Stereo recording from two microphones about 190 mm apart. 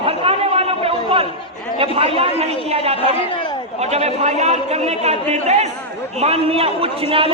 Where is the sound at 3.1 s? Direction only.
25° left (ahead or behind).